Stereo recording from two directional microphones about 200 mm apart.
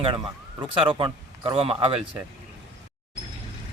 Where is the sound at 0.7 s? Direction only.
25° right (ahead or behind).